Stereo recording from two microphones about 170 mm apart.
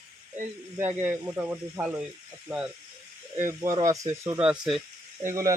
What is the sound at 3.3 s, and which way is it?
Speech, 15° right (ahead or behind).